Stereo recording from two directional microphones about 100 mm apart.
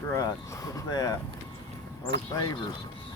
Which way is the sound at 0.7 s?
40° left (ahead or behind).